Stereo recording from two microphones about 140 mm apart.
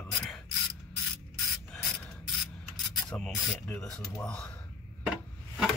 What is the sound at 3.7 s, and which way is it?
Speech, 10° left (ahead or behind).